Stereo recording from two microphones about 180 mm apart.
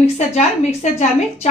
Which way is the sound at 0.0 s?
35° left (ahead or behind).